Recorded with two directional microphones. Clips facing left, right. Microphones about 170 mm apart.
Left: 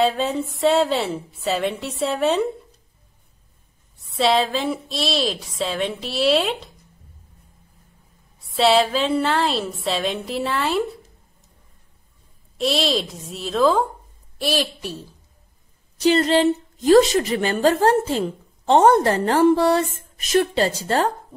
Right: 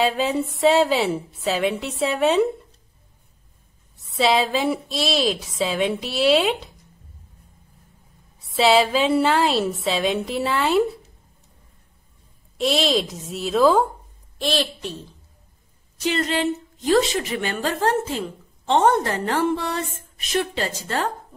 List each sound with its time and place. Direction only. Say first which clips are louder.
0.0 s a woman's voice: left 1 dB; centre (ahead or behind)
4.0 s a woman's voice: left 1 dB; centre (ahead or behind)
8.4 s a woman's voice: even; centre (ahead or behind)
12.5 s a woman's voice: right 1 dB; centre (ahead or behind)
14.4 s a woman's voice: left 1 dB; 10° left (ahead or behind)
16.0 s a woman's voice: left 6 dB; 35° left (ahead or behind)